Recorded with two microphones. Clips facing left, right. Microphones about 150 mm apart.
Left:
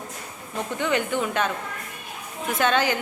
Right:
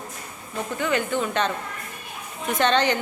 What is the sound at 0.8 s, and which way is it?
Speech, 15° left (ahead or behind).